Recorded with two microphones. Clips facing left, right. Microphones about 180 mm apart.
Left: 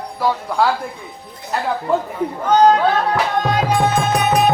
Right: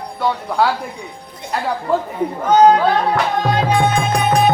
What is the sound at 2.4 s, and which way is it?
Speech, 10° right (ahead or behind).